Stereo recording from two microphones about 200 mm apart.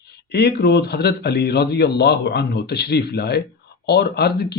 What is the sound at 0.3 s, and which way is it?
Speech, 55° left (ahead or behind).